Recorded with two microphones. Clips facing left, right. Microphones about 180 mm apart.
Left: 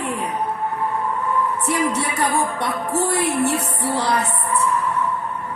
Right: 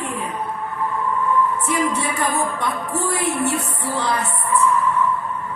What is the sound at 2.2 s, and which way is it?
Speech, 70° left (ahead or behind).